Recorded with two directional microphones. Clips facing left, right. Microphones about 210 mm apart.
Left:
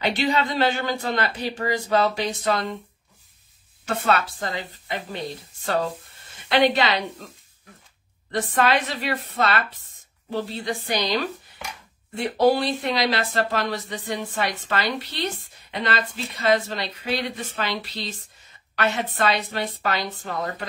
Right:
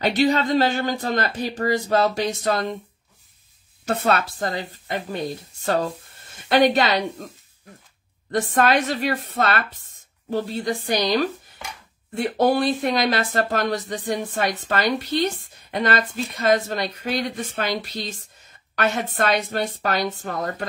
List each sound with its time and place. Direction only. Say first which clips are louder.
0.0 s speech: right 4 dB; 40° right (ahead or behind)
3.8 s speech: right 2 dB; 40° right (ahead or behind)
6.3 s a woman's voice: right 2 dB; 45° right (ahead or behind)
8.3 s speech: right 2 dB; 45° right (ahead or behind)
12.4 s speech: even; 50° right (ahead or behind)